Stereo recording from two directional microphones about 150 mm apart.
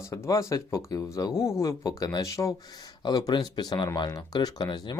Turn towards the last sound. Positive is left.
turn(degrees=30)  # may be behind; listen again after turning